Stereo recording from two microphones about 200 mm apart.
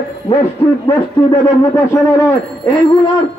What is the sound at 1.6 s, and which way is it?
Speech, 15° left (ahead or behind).